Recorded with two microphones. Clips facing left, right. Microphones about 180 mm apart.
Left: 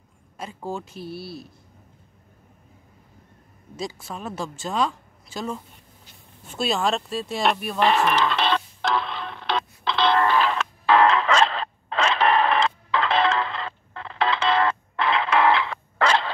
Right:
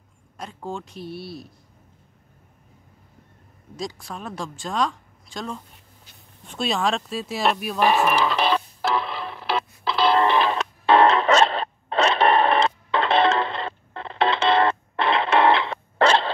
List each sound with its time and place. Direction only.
0.4 s a woman's voice: 5° left (ahead or behind)
3.7 s a woman's voice: centre (ahead or behind)
8.0 s music: 10° right (ahead or behind)
10.1 s music: 20° right (ahead or behind)
12.2 s a sound: 30° right (ahead or behind)